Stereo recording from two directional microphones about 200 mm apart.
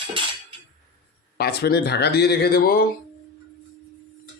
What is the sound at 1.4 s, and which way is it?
Speech, 55° left (ahead or behind).